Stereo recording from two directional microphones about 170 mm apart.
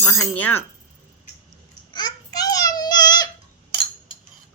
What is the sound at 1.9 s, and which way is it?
Babbling, 25° left (ahead or behind).